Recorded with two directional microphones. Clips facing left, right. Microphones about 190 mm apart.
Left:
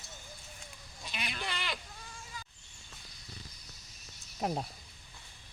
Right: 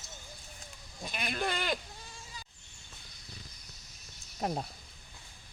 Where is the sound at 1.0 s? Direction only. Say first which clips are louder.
Right 6 dB; 50° right (ahead or behind).